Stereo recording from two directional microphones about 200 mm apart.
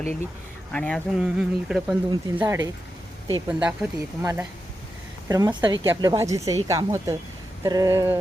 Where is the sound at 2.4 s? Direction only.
15° right (ahead or behind).